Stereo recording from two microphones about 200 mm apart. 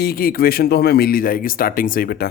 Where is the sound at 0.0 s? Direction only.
50° left (ahead or behind).